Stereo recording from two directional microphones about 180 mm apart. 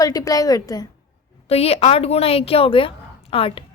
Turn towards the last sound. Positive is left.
turn(degrees=30)  # may be behind; listen again after turning